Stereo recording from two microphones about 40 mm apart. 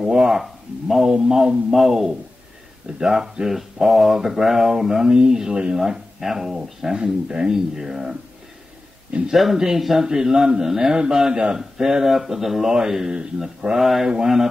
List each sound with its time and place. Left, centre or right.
0.0 s speech: right
0.3 s speech: centre
9.3 s speech: centre; by 13.7 s right
13.7 s speech: centre
14.0 s speech: centre